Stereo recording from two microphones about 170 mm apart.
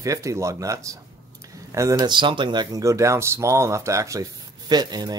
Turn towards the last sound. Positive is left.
turn(degrees=-25)  # may be behind; listen again after turning